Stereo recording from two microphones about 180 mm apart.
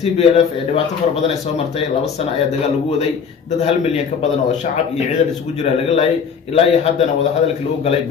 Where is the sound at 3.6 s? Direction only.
35° left (ahead or behind).